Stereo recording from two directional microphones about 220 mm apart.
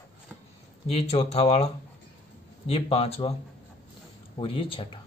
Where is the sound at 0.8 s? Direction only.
30° left (ahead or behind).